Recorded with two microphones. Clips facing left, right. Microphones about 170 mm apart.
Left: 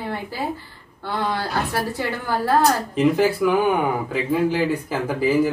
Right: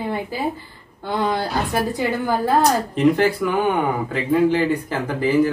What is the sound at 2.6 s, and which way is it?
Speech, 5° left (ahead or behind).